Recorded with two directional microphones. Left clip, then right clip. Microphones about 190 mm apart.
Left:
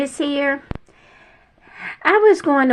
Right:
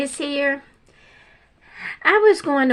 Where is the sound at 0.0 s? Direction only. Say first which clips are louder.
Left 2 dB; 10° right (ahead or behind).